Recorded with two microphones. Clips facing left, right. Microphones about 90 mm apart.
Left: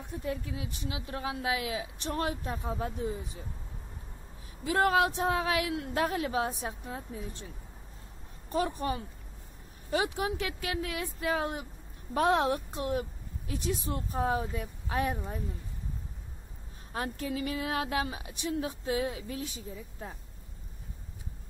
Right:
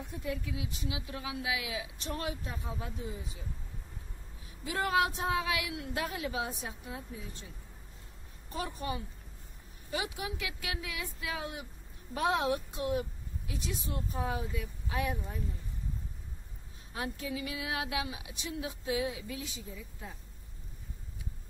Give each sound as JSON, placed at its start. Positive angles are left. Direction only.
{"t": 0.2, "sound": "a woman's voice", "side_deg": 35}
{"t": 4.6, "sound": "a woman's voice", "side_deg": 45}
{"t": 8.5, "sound": "a woman's voice", "side_deg": 55}
{"t": 16.9, "sound": "a woman's voice", "side_deg": 50}